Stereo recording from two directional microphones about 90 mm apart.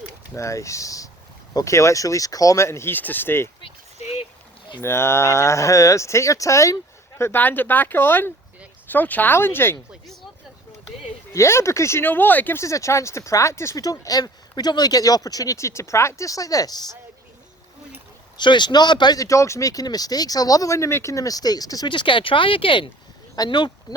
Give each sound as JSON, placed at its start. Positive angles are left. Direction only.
{"t": 0.3, "sound": "speech", "side_deg": 35}
{"t": 4.8, "sound": "speech", "side_deg": 30}
{"t": 7.2, "sound": "speech", "side_deg": 25}
{"t": 11.3, "sound": "speech", "side_deg": 30}
{"t": 12.6, "sound": "speech", "side_deg": 35}
{"t": 18.3, "sound": "speech", "side_deg": 60}
{"t": 21.8, "sound": "speech", "side_deg": 65}
{"t": 23.5, "sound": "speech", "side_deg": 60}